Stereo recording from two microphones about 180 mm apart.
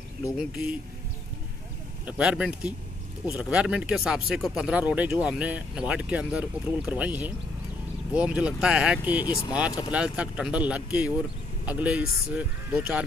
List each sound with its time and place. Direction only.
2.0 s speech: 5° right (ahead or behind)
9.2 s speech: 20° left (ahead or behind)
9.8 s speech: 5° right (ahead or behind)